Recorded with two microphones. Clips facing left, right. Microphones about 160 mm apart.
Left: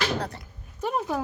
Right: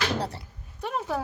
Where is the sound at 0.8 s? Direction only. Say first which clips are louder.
Left 2 dB; centre (ahead or behind).